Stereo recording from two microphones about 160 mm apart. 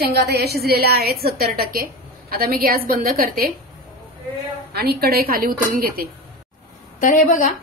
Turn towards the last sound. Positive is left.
turn(degrees=55)  # may be behind; listen again after turning